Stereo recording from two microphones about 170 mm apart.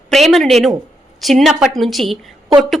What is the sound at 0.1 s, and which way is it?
A woman's voice, centre (ahead or behind).